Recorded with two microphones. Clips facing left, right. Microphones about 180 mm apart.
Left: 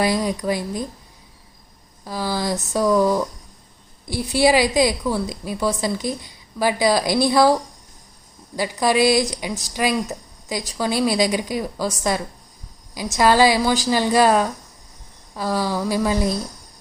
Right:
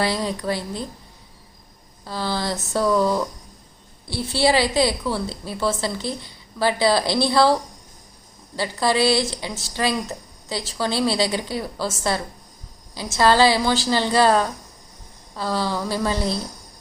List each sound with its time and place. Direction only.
0.0 s a woman's voice: 15° left (ahead or behind)
2.0 s a woman's voice: 10° left (ahead or behind)